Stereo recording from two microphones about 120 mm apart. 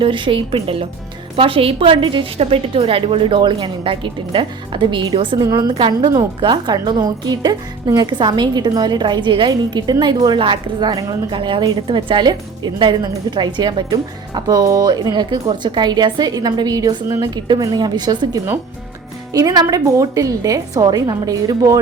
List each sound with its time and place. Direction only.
0.0 s a woman's voice: 45° right (ahead or behind)
11.3 s a woman's voice: 45° right (ahead or behind)